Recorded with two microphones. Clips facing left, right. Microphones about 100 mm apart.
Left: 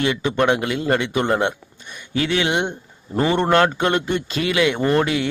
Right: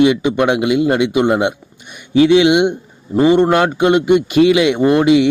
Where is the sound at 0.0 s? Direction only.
15° right (ahead or behind).